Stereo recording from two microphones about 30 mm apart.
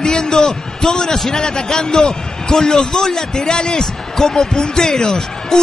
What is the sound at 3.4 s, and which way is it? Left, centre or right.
A man's voice, left.